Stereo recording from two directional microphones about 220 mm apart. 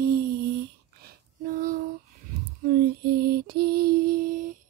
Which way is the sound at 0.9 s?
45° right (ahead or behind).